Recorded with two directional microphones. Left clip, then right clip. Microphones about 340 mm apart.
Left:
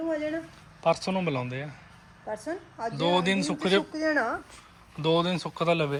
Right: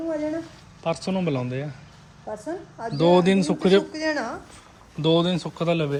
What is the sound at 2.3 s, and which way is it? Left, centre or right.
Speech, left.